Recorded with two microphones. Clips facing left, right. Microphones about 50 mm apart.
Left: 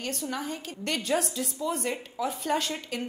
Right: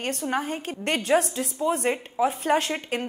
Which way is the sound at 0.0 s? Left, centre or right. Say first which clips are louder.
Right 6 dB; right.